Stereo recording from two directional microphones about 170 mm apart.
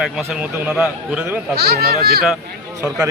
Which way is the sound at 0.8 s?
5° right (ahead or behind).